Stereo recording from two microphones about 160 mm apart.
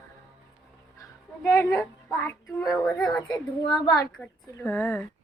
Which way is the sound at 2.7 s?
20° left (ahead or behind).